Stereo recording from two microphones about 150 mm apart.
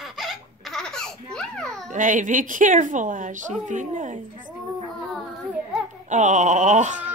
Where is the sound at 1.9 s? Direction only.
60° right (ahead or behind).